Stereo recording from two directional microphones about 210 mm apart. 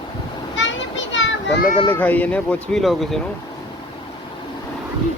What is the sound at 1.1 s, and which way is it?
Children playing, 60° left (ahead or behind).